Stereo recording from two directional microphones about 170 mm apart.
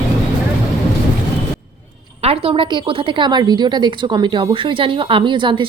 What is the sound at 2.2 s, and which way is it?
Speech, 35° right (ahead or behind).